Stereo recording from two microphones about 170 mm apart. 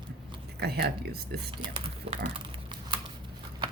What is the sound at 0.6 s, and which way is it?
Speech, 70° right (ahead or behind).